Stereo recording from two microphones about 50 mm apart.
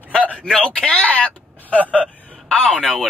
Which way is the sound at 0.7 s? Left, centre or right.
Left.